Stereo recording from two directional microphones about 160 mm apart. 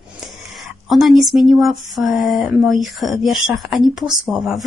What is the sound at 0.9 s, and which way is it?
Speech, centre (ahead or behind).